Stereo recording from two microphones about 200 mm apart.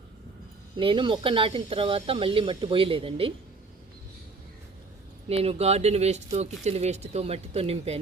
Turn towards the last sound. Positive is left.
turn(degrees=-30)  # may be behind; listen again after turning